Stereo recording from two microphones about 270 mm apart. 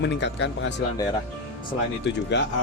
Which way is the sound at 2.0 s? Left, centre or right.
Left.